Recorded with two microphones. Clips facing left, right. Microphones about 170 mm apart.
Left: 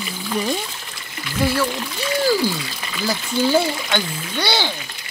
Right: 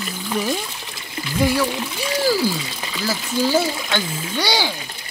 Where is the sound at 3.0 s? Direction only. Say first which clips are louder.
Left 1 dB; 5° right (ahead or behind).